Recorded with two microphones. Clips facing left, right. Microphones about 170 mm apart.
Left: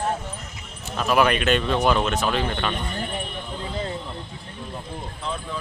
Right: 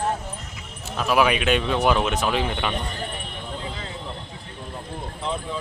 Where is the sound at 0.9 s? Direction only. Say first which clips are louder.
Even; 5° right (ahead or behind).